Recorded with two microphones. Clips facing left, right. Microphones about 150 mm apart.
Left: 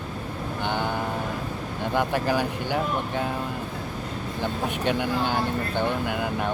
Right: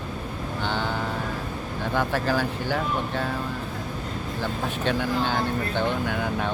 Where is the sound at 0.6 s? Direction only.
15° left (ahead or behind).